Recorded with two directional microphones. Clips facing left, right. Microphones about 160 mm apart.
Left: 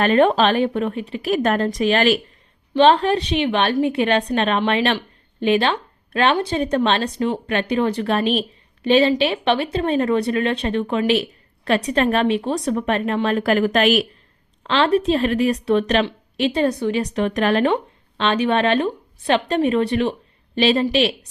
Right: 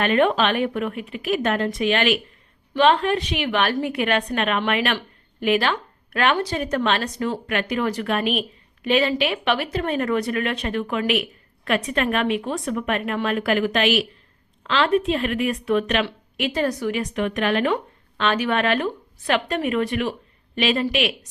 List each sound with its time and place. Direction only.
0.0 s a woman's voice: 35° left (ahead or behind)
4.9 s a sound: 25° left (ahead or behind)
6.5 s a woman's voice: 25° left (ahead or behind); by 14.1 s 45° left (ahead or behind)
14.6 s a woman's voice: 35° left (ahead or behind)
18.2 s a woman's voice: 25° left (ahead or behind)